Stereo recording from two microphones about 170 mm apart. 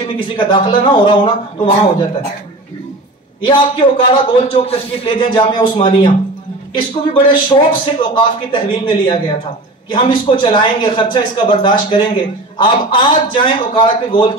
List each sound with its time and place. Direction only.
0.4 s a man's voice: 30° left (ahead or behind)
4.1 s a man's voice: 30° left (ahead or behind)